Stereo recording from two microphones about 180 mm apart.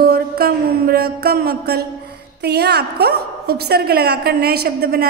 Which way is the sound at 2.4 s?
65° right (ahead or behind).